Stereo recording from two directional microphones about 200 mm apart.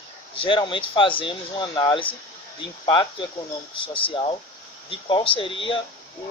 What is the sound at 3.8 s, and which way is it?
Speech, 25° left (ahead or behind).